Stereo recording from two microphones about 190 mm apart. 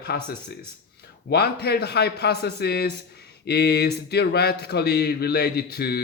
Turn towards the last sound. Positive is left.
turn(degrees=55)  # may be behind; listen again after turning